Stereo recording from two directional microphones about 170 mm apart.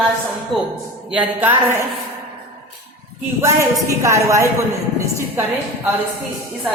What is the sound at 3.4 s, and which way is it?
A woman's voice, 15° right (ahead or behind).